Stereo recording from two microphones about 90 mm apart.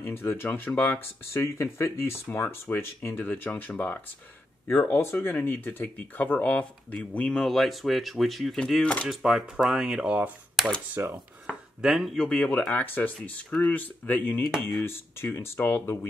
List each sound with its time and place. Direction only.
0.0 s speech: 25° left (ahead or behind)
4.6 s speech: 30° left (ahead or behind); by 10.3 s 15° right (ahead or behind)
10.6 s speech: 5° right (ahead or behind)
11.0 s dishes: 25° right (ahead or behind)
11.8 s speech: centre (ahead or behind)
12.3 s speech: 15° left (ahead or behind)